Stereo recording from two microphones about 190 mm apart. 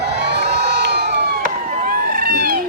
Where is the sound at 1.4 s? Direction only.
50° right (ahead or behind).